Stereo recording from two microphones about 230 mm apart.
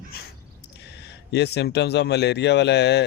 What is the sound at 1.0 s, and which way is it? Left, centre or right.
Speech, left.